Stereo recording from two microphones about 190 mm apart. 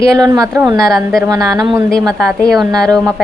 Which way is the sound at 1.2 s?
15° right (ahead or behind).